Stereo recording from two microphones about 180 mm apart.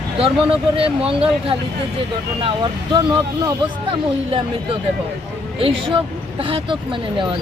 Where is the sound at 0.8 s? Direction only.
30° right (ahead or behind).